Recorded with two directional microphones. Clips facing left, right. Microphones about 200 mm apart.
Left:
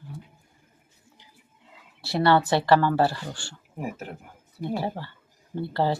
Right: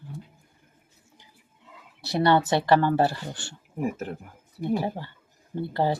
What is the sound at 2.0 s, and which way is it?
Speech, 20° right (ahead or behind).